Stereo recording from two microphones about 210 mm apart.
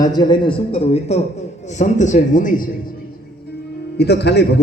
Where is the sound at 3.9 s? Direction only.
50° left (ahead or behind).